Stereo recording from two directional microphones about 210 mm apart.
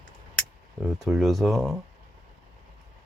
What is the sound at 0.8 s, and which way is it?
Speech, 5° right (ahead or behind).